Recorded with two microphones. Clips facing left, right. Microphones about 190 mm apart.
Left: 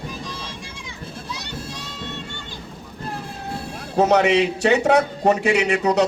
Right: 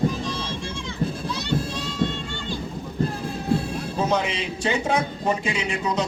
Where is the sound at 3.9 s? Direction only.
70° left (ahead or behind).